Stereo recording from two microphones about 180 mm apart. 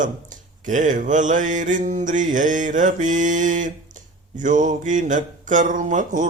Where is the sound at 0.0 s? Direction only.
45° right (ahead or behind).